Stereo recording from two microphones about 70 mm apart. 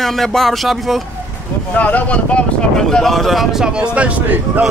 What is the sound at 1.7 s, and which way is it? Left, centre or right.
Speech, left.